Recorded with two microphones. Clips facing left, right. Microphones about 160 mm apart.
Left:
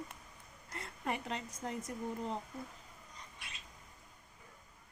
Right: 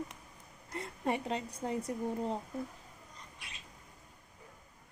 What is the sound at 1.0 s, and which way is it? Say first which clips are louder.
Speech: right 5 dB; 30° right (ahead or behind).